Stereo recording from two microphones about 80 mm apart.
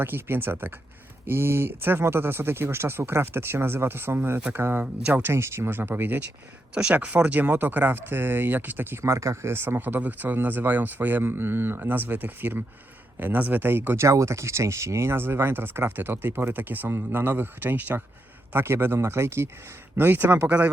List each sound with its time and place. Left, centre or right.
0.0 s speech: right
5.3 s speech: right; by 20.7 s centre